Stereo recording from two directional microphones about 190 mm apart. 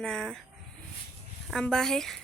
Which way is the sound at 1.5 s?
5° left (ahead or behind).